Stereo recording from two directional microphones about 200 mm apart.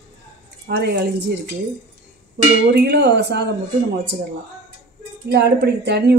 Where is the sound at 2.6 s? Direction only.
55° right (ahead or behind).